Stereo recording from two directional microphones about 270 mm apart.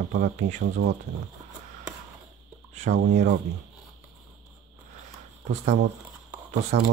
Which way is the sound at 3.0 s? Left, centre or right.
Right.